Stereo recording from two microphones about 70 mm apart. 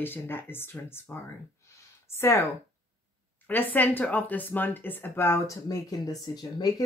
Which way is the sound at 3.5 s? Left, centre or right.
Left.